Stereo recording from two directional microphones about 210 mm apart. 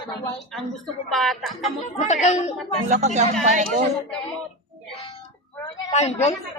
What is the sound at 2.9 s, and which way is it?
Speech, 35° right (ahead or behind).